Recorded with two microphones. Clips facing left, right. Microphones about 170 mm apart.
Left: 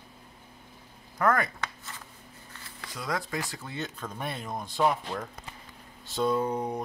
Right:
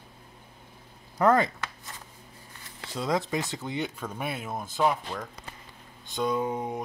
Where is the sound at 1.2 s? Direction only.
25° right (ahead or behind).